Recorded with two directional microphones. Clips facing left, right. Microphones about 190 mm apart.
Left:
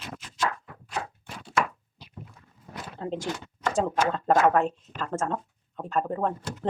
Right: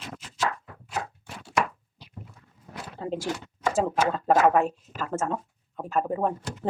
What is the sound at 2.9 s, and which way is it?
Speech, 5° right (ahead or behind).